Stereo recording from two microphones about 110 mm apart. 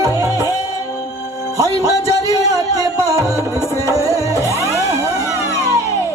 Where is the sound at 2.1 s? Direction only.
30° right (ahead or behind).